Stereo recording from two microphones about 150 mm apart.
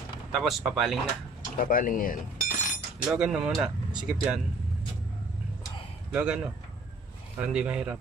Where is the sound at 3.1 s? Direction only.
5° right (ahead or behind).